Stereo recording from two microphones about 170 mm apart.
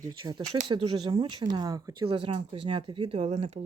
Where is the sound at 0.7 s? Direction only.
30° right (ahead or behind).